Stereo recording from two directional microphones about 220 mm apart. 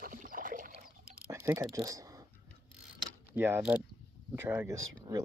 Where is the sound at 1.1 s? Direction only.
10° right (ahead or behind).